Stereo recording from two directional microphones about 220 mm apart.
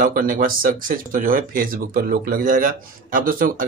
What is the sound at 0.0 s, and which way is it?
Speech, 40° right (ahead or behind).